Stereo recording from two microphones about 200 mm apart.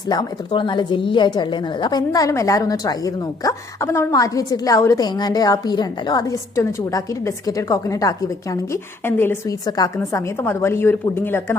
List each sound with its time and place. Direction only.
0.1 s a woman's voice: 20° left (ahead or behind)